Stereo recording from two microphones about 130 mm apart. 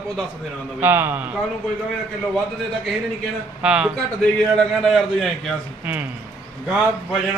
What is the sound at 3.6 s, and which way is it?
Speech, 5° right (ahead or behind).